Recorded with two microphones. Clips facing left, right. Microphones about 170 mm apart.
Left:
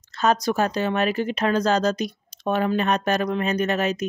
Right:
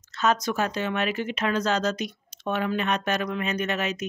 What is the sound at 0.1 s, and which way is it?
Speech, 35° left (ahead or behind).